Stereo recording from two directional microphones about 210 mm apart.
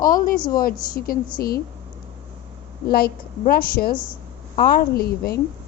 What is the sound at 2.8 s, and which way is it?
A woman's voice, 45° left (ahead or behind).